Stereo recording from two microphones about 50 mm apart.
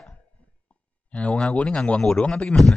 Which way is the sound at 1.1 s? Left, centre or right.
Left.